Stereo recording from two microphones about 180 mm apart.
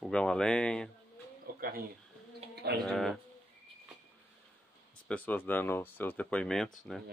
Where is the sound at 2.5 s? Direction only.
65° right (ahead or behind).